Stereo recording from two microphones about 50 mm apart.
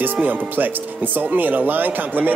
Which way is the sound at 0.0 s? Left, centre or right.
Right.